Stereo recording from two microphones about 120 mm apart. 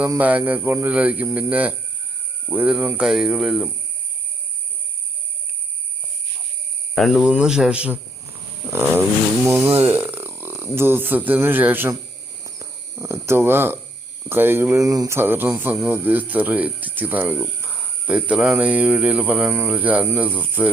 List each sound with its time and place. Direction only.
0.2 s speech: 15° right (ahead or behind)
6.9 s speech: centre (ahead or behind); by 9.7 s 20° right (ahead or behind)
9.9 s a sound: 15° right (ahead or behind)
10.8 s speech: 20° right (ahead or behind)
12.4 s cricket: 25° right (ahead or behind)
14.3 s speech: 20° right (ahead or behind)